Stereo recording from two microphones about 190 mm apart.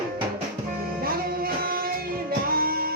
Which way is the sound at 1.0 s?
50° right (ahead or behind).